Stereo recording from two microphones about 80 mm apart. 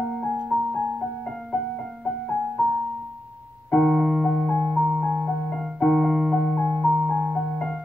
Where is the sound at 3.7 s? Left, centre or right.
Centre.